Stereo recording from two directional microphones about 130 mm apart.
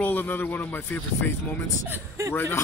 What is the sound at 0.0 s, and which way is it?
Speech, 15° left (ahead or behind).